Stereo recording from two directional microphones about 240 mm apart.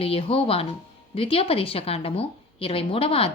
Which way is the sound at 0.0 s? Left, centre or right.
Left.